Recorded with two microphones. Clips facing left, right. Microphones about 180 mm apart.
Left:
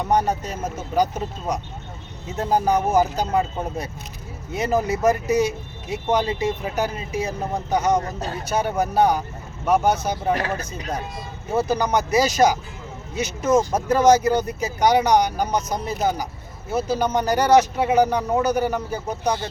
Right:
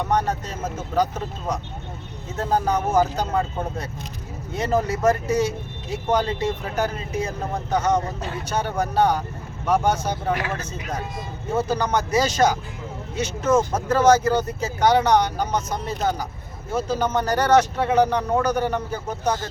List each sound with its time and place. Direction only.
0.0 s speech: 10° left (ahead or behind)
10.3 s speech: 40° left (ahead or behind)
11.5 s speech: 10° left (ahead or behind)